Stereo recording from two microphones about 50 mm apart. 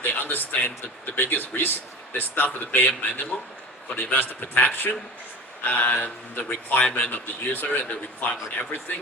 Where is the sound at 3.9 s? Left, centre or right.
Left.